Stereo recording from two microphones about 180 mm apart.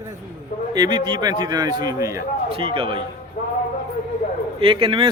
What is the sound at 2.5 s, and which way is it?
Speech, 30° right (ahead or behind).